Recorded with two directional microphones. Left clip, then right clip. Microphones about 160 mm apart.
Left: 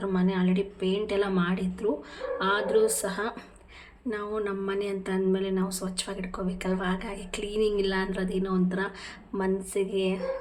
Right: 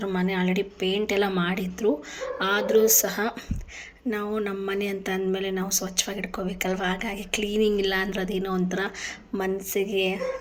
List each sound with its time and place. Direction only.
0.0 s speech: 20° right (ahead or behind)